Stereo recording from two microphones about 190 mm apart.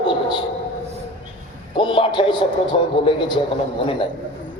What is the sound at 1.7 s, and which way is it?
A man's voice, 25° left (ahead or behind).